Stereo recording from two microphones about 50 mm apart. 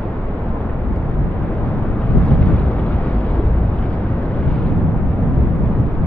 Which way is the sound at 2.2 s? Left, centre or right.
Left.